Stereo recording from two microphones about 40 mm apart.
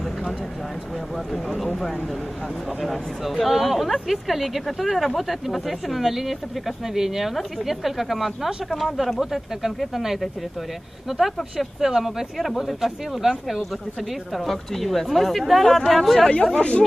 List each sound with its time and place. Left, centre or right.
1.3 s speech: centre
2.8 s speech: centre
11.1 s speech: centre
12.4 s speech: centre
16.5 s speech: left